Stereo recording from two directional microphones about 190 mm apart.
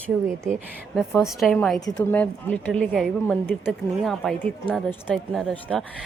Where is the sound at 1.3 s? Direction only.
Centre (ahead or behind).